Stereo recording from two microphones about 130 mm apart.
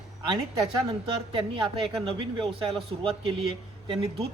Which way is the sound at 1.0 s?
40° right (ahead or behind).